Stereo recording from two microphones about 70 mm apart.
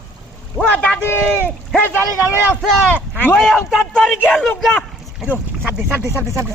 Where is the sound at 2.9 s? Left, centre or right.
Centre.